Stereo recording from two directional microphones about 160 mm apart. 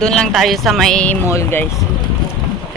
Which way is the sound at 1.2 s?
20° left (ahead or behind).